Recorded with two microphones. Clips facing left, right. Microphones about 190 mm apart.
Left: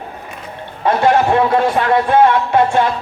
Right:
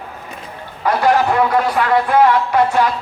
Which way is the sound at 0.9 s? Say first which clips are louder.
Left 2 dB; 25° left (ahead or behind).